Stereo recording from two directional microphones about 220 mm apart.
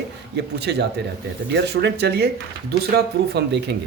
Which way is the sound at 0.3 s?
50° right (ahead or behind).